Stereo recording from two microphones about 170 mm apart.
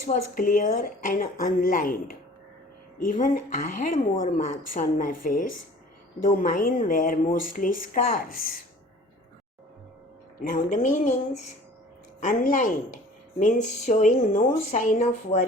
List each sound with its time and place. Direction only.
0.1 s speech: 50° left (ahead or behind)
10.4 s speech: 50° left (ahead or behind)